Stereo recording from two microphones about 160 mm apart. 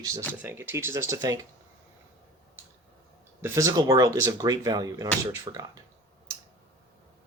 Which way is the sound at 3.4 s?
15° right (ahead or behind).